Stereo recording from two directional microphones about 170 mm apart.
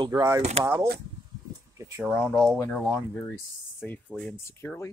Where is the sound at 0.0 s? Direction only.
20° right (ahead or behind).